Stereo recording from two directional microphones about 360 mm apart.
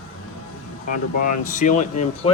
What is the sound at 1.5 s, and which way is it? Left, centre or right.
Speech, left.